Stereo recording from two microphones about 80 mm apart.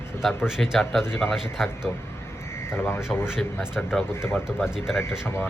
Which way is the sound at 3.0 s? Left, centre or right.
Centre.